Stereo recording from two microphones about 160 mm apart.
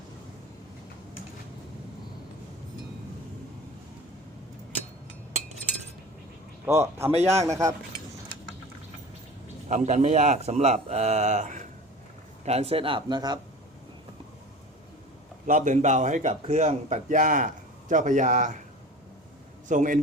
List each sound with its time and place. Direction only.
6.7 s a man's voice: 15° right (ahead or behind)
9.6 s a man's voice: 50° right (ahead or behind); by 13.4 s 30° right (ahead or behind)
15.4 s a man's voice: 55° right (ahead or behind)
19.6 s a man's voice: 50° right (ahead or behind)